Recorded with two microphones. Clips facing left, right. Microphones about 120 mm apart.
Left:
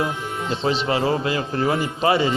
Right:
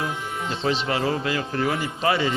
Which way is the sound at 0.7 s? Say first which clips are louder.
Left 3 dB; 25° left (ahead or behind).